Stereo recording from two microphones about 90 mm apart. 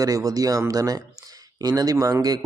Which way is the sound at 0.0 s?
40° right (ahead or behind).